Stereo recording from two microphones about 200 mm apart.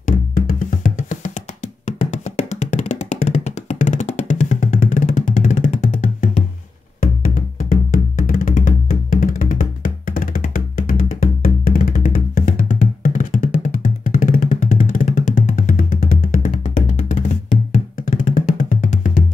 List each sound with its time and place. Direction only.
0.0 s music: 40° left (ahead or behind)